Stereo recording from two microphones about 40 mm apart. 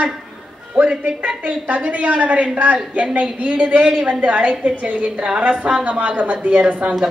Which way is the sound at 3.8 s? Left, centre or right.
Centre.